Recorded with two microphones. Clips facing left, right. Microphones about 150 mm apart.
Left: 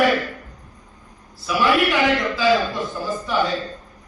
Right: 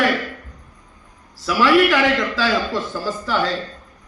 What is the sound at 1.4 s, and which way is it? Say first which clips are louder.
A man's voice: right 4 dB; 90° right.